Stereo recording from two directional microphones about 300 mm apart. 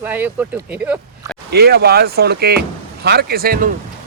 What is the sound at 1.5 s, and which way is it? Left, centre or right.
Speech, right.